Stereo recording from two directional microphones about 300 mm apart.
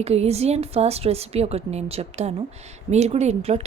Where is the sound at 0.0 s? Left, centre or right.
Right.